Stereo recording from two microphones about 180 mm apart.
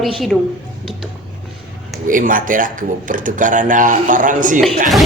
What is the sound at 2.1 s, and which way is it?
Speech, 50° right (ahead or behind).